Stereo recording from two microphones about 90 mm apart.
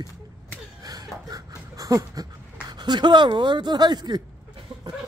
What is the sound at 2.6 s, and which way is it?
Speech, 50° right (ahead or behind).